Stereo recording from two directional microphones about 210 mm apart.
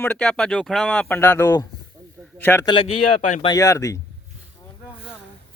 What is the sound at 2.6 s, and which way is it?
Speech, 25° left (ahead or behind).